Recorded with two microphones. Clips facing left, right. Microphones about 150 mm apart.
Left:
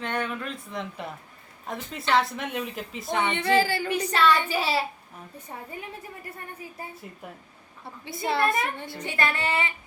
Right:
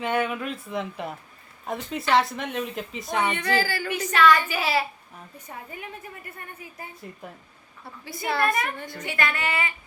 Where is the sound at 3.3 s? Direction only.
25° left (ahead or behind).